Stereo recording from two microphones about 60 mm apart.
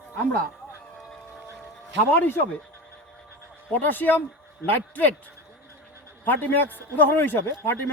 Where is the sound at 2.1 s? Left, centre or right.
Left.